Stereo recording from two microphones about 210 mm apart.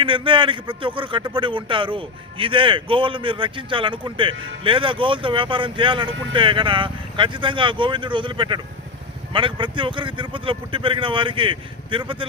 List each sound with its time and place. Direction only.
0.0 s a man's voice: 25° right (ahead or behind)